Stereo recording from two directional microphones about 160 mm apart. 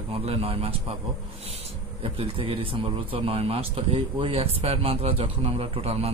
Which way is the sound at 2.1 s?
35° right (ahead or behind).